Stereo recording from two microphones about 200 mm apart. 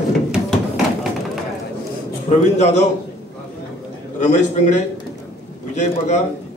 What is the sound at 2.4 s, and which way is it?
Speech, 35° left (ahead or behind).